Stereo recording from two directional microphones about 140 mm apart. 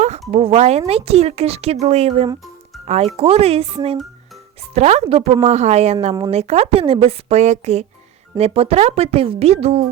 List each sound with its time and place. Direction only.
0.0 s speech: 50° right (ahead or behind)
4.7 s speech: 50° right (ahead or behind)